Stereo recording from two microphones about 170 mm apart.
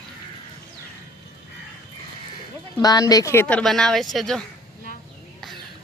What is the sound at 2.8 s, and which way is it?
Speech, 20° left (ahead or behind).